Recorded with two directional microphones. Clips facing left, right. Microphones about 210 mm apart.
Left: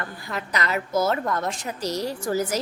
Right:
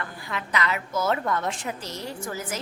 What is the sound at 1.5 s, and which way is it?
Speech, 40° left (ahead or behind).